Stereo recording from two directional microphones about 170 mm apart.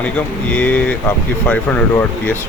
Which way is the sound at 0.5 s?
10° left (ahead or behind).